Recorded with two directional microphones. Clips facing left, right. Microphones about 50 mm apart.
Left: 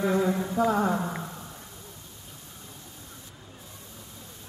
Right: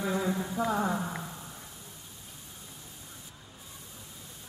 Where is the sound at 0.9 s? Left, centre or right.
Centre.